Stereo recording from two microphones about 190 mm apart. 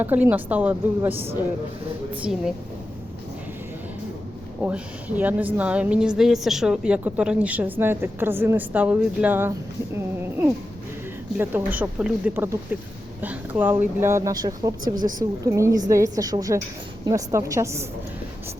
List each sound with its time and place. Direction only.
0.0 s a woman's voice: 10° right (ahead or behind)
4.6 s a woman's voice: 5° right (ahead or behind)
11.8 s a woman's voice: 5° right (ahead or behind)